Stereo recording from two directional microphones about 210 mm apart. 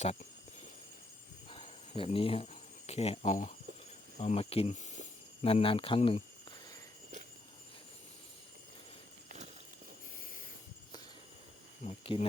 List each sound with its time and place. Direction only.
0.0 s speech: 30° left (ahead or behind)
1.5 s cricket: 30° left (ahead or behind)
4.2 s speech: 30° left (ahead or behind)
11.9 s speech: 25° left (ahead or behind)